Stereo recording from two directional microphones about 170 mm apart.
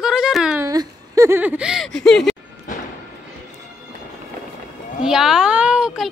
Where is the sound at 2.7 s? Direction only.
50° left (ahead or behind).